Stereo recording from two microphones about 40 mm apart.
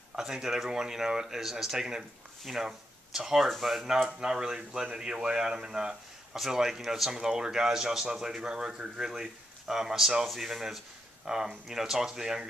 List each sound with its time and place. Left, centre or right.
0.1 s speech: centre
3.3 s speech: centre
3.7 s speech: centre